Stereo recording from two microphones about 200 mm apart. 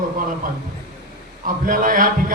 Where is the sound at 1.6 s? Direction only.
45° right (ahead or behind).